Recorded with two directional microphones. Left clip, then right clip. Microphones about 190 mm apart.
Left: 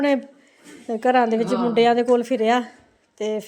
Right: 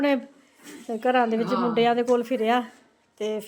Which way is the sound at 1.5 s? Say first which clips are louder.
Left 2 dB; centre (ahead or behind).